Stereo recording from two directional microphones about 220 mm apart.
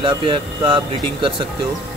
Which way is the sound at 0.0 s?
20° right (ahead or behind).